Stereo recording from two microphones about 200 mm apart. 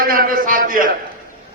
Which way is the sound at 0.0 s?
45° right (ahead or behind).